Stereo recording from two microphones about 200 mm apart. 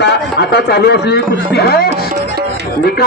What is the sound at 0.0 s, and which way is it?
A man's voice, 55° left (ahead or behind).